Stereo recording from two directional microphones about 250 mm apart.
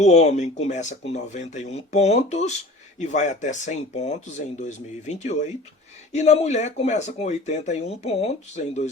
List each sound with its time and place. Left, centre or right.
0.0 s speech: left